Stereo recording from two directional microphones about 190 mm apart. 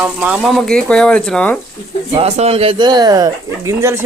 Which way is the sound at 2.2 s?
35° right (ahead or behind).